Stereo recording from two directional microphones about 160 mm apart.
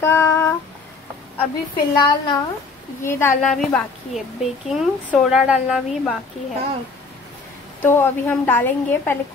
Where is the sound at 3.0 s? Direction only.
15° left (ahead or behind).